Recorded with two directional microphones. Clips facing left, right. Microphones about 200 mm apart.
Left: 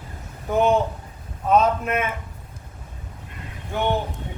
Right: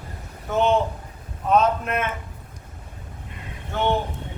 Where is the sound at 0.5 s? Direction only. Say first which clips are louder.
Left 1 dB; 10° left (ahead or behind).